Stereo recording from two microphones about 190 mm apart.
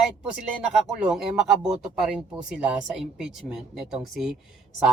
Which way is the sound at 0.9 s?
5° right (ahead or behind).